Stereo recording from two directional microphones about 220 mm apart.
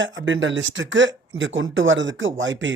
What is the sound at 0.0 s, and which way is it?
Speech, 55° right (ahead or behind).